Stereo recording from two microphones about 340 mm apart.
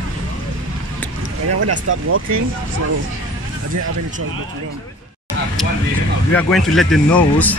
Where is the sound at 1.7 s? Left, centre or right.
Right.